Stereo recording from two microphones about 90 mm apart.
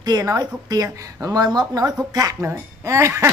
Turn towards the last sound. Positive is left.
turn(degrees=-30)  # may be behind; listen again after turning